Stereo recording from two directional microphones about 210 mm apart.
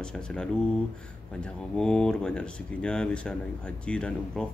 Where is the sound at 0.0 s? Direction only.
5° left (ahead or behind).